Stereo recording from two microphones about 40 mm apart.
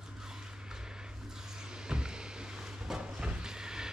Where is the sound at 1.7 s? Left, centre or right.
Centre.